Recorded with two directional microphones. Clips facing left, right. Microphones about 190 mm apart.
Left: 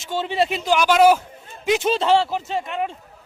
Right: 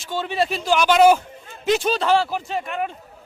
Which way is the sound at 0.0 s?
25° left (ahead or behind).